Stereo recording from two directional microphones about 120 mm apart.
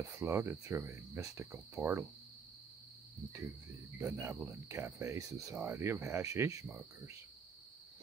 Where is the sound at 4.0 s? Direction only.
20° right (ahead or behind).